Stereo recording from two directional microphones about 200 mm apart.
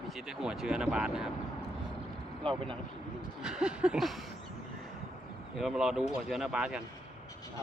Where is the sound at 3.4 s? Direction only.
5° right (ahead or behind).